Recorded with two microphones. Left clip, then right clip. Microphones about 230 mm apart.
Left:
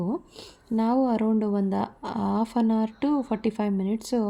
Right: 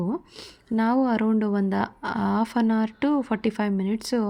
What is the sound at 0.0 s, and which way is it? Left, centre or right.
A woman's voice, centre.